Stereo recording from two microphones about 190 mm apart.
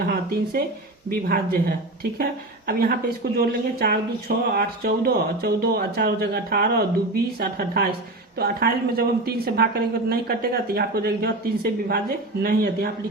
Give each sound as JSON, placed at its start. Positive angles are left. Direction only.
{"t": 0.0, "sound": "a woman's voice", "side_deg": -55}
{"t": 2.6, "sound": "a woman's voice", "side_deg": -55}